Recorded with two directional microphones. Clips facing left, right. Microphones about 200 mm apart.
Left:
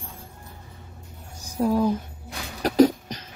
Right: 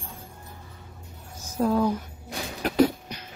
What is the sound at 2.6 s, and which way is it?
Cough, 40° left (ahead or behind).